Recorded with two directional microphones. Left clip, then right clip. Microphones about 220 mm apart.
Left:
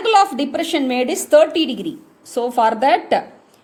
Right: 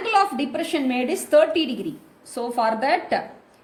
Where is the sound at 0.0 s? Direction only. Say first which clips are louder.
Left 6 dB; 40° left (ahead or behind).